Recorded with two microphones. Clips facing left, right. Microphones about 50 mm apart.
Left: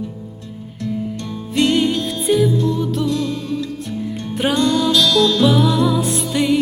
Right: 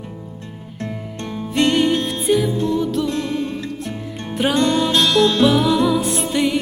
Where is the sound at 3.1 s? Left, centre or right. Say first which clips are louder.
Left 1 dB; right.